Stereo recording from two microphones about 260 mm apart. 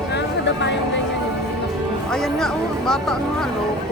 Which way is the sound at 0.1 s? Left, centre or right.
Left.